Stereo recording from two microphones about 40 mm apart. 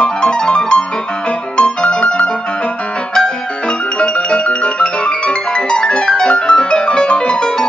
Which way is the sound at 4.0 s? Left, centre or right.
Left.